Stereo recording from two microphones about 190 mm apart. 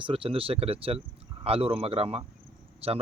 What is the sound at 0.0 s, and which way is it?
Speech, 25° right (ahead or behind).